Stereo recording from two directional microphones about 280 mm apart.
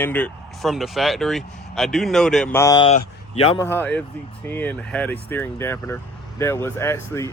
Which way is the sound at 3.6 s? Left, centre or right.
Centre.